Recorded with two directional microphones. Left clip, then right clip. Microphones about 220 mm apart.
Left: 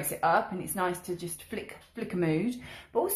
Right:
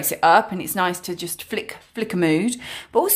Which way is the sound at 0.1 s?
35° right (ahead or behind).